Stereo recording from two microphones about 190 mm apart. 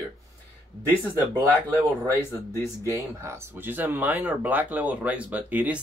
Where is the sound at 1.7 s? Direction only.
10° left (ahead or behind).